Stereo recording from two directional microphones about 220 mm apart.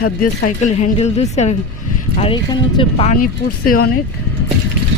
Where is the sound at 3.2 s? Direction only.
40° left (ahead or behind).